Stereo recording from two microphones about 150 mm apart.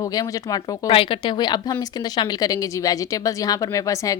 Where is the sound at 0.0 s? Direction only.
25° left (ahead or behind).